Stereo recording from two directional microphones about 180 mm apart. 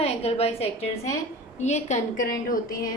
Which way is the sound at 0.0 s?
35° left (ahead or behind).